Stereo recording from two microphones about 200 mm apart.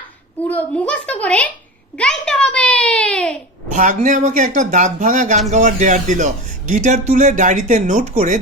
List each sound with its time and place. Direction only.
0.4 s a child's voice: 10° left (ahead or behind)
3.7 s a man's voice: 40° right (ahead or behind)